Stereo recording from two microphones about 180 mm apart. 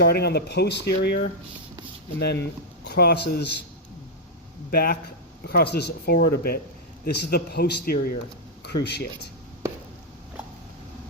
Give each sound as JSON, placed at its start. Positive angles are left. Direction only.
{"t": 0.0, "sound": "speech", "side_deg": 60}
{"t": 4.7, "sound": "speech", "side_deg": 60}